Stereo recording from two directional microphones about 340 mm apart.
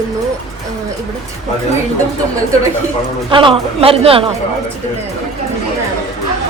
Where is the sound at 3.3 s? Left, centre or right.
Centre.